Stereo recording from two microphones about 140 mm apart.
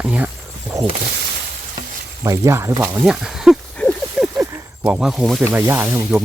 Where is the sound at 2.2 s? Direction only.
25° right (ahead or behind).